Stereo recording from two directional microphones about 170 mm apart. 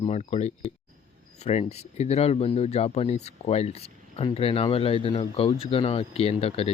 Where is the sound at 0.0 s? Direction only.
40° left (ahead or behind).